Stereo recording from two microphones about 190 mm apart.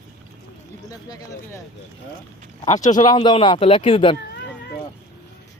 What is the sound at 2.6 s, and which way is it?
Speech, 40° left (ahead or behind).